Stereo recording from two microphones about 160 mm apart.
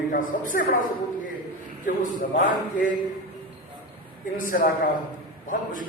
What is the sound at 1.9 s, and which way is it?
Speech, 55° left (ahead or behind).